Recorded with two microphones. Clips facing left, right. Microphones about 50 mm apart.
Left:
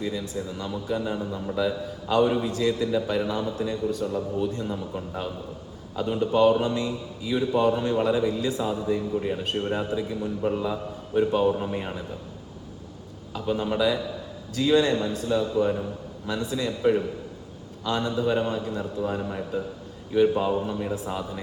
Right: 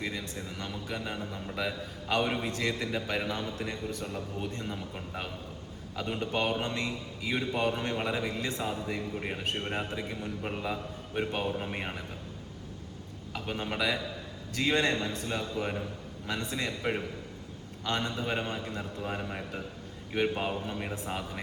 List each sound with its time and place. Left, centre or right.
0.0 s a man's voice: right
6.0 s mantra: right
7.8 s a man's voice: right
10.4 s a man's voice: right
13.3 s a man's voice: right
19.3 s a man's voice: right
20.1 s a man's voice: right